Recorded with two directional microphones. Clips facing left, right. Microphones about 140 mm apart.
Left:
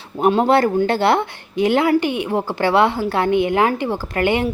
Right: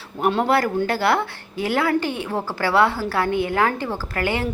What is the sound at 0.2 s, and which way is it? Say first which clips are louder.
A woman's voice: left 5 dB; 20° left (ahead or behind).